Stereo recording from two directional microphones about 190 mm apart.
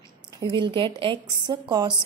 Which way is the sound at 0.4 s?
25° right (ahead or behind).